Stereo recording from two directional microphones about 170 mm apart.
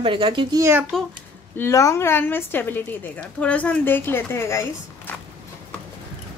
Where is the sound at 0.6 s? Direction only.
10° right (ahead or behind).